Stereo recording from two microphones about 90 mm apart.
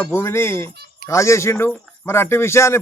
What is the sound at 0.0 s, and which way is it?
Speech, 25° left (ahead or behind).